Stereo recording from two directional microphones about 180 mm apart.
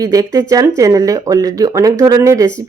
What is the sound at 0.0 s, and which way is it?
Speech, 20° right (ahead or behind).